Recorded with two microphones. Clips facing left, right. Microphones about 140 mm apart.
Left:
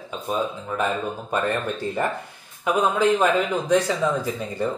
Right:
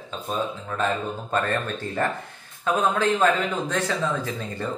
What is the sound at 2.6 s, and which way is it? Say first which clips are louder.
Speech: left 2 dB; 15° left (ahead or behind).